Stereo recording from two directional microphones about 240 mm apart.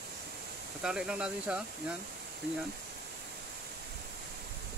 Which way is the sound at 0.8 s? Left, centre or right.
Centre.